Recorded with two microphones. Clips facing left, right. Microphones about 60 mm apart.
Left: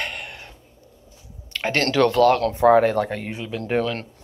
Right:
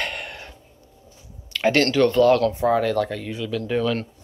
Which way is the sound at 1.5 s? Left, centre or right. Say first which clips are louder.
Right 6 dB; left.